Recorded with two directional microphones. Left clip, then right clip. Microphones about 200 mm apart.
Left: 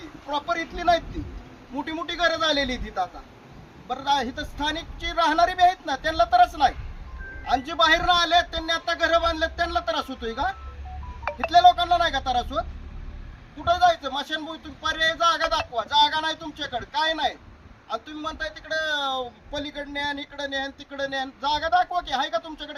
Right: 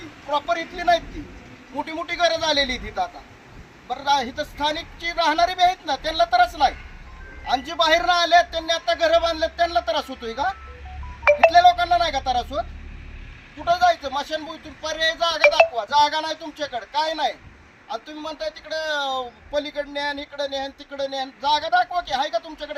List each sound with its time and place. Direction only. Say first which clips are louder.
0.3 s a man's voice: right 4 dB; centre (ahead or behind)
11.3 s music: right 14 dB; 50° right (ahead or behind)
11.7 s a man's voice: right 2 dB; centre (ahead or behind)
13.8 s a man's voice: right 1 dB; centre (ahead or behind)
18.9 s a man's voice: right 2 dB; centre (ahead or behind)